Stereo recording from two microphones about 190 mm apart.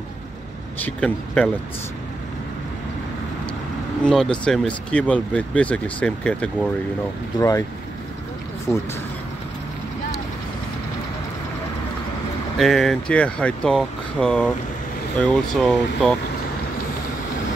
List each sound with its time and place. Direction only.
0.8 s speech: 5° left (ahead or behind)
4.0 s speech: 5° left (ahead or behind)
7.3 s speech: 15° left (ahead or behind)
8.7 s speech: 5° left (ahead or behind)
12.5 s speech: centre (ahead or behind)